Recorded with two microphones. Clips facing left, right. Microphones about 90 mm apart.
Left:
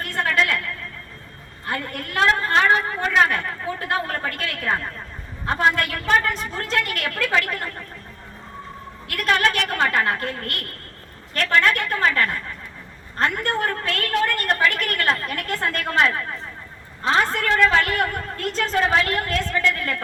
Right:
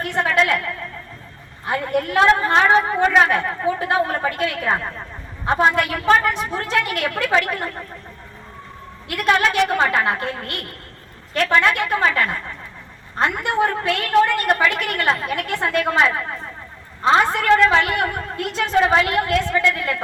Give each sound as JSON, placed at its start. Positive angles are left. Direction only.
{"t": 0.0, "sound": "a woman's voice", "side_deg": -15}
{"t": 9.0, "sound": "a woman's voice", "side_deg": -15}